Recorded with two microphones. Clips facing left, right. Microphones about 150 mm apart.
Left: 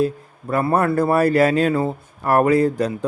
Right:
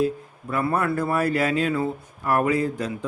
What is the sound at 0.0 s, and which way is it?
Speech, 40° left (ahead or behind).